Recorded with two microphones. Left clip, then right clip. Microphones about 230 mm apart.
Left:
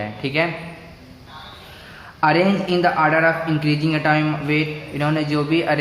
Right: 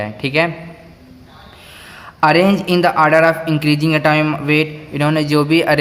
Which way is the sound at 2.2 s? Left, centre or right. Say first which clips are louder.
Right 5 dB; right.